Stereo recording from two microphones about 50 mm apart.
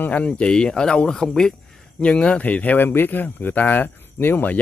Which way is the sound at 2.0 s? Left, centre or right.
Left.